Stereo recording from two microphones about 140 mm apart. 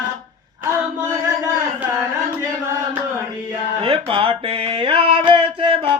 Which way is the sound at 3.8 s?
40° right (ahead or behind).